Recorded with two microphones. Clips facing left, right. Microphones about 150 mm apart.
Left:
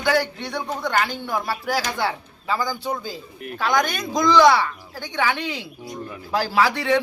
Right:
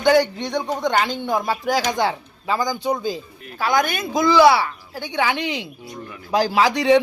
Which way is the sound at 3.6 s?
5° right (ahead or behind).